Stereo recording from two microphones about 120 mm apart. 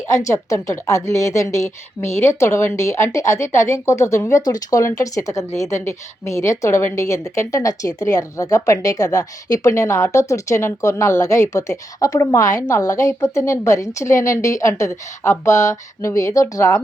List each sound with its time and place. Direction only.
0.1 s a woman's voice: 25° left (ahead or behind)